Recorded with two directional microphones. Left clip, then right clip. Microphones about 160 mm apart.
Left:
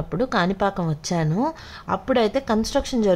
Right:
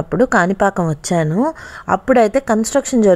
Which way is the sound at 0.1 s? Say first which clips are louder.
Right 8 dB; 40° right (ahead or behind).